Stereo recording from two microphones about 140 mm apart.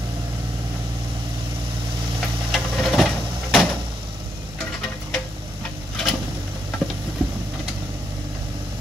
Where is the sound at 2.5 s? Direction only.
Centre (ahead or behind).